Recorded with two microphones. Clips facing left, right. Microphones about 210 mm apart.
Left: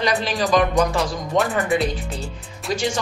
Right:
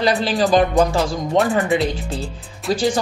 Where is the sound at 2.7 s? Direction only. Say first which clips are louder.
Right 4 dB; 35° right (ahead or behind).